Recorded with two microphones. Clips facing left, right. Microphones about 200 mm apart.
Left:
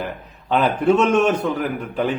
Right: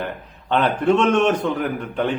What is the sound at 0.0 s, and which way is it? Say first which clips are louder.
A man's voice: even; 5° left (ahead or behind).